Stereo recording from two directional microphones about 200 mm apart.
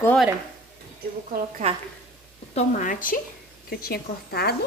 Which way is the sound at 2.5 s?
40° left (ahead or behind).